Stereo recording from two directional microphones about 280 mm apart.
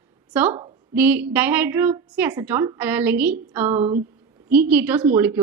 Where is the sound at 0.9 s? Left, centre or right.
Centre.